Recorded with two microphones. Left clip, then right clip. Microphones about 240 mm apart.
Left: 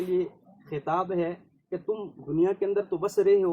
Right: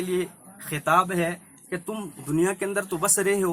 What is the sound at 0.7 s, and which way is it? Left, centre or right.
Speech, right.